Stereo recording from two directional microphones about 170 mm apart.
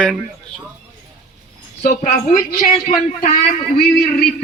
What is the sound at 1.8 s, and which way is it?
A man's voice, 45° left (ahead or behind).